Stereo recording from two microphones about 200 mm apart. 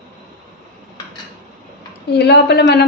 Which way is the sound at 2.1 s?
55° left (ahead or behind).